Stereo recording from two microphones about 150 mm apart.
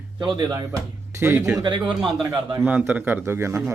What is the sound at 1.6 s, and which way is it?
Speech, 30° right (ahead or behind).